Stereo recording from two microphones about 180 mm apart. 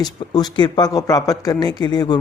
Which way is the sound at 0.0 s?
20° left (ahead or behind).